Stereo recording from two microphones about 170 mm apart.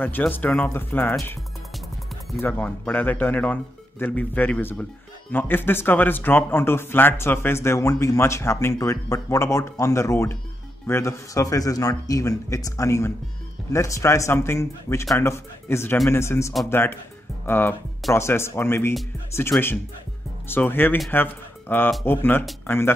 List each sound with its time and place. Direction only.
0.0 s speech: 10° left (ahead or behind)
2.3 s speech: 10° left (ahead or behind)